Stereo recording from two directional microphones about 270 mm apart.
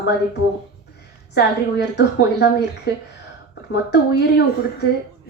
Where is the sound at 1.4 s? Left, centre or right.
Left.